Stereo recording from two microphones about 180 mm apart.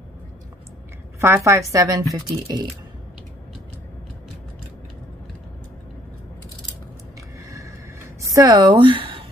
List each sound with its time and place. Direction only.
1.2 s a woman's voice: 15° right (ahead or behind)
7.4 s a sound: 20° right (ahead or behind)
8.2 s speech: 20° right (ahead or behind)